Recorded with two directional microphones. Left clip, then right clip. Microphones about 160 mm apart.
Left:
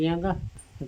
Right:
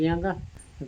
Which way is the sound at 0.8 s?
5° left (ahead or behind).